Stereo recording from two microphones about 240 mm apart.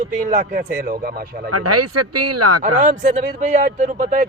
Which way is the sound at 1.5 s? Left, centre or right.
Right.